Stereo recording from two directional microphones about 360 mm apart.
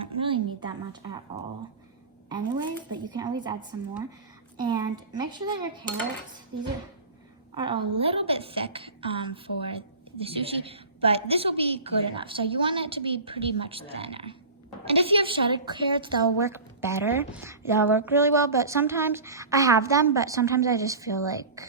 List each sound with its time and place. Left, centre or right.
0.0 s a sound: centre
3.0 s a woman's voice: centre
6.5 s dishes: right
7.5 s a woman's voice: centre